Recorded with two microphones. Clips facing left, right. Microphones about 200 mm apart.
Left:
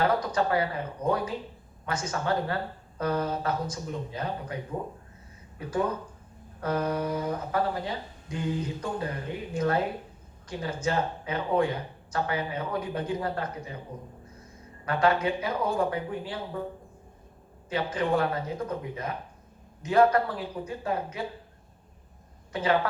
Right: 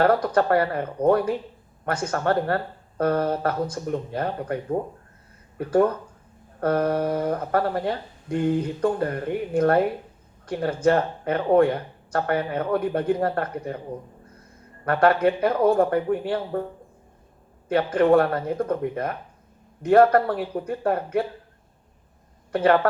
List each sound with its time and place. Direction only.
0.0 s speech: 55° right (ahead or behind)
14.8 s speech: 60° right (ahead or behind)
17.7 s speech: 55° right (ahead or behind)
22.5 s speech: 55° right (ahead or behind)